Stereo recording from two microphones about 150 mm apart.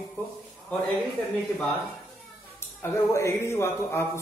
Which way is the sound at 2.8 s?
20° left (ahead or behind).